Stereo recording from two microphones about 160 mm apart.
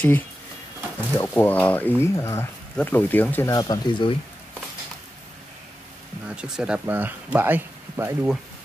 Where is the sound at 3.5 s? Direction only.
25° left (ahead or behind).